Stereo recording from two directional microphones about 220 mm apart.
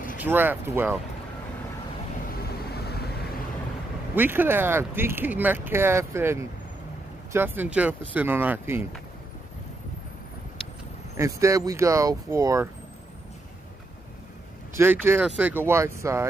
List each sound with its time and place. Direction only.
0.2 s speech: 10° right (ahead or behind)
2.7 s vehicle: 45° left (ahead or behind)
4.1 s speech: 10° right (ahead or behind)
11.1 s speech: 15° right (ahead or behind)
14.8 s speech: 10° right (ahead or behind)